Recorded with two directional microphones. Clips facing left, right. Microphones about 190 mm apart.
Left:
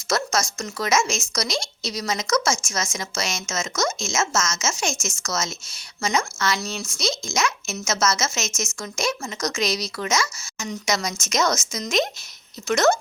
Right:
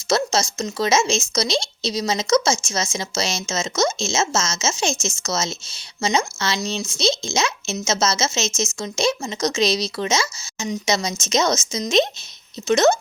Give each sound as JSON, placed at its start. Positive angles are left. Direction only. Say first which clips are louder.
{"t": 0.1, "sound": "speech", "louder": "right 4 dB", "side_deg": -25}